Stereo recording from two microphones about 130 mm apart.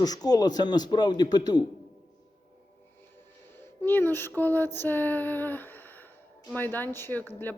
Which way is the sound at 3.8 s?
15° left (ahead or behind).